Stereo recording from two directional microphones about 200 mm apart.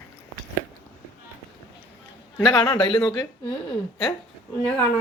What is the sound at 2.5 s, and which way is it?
Speech, 20° left (ahead or behind).